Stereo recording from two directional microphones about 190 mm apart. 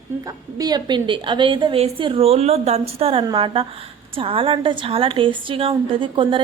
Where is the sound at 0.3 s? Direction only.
20° right (ahead or behind).